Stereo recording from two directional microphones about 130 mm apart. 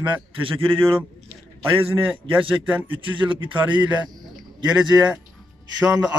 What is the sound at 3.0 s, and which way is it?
Speech, 40° right (ahead or behind).